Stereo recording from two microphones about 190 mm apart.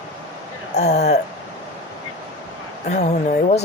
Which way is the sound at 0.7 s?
35° left (ahead or behind).